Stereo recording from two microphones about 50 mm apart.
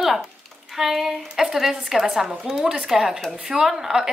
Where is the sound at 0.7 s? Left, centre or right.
Centre.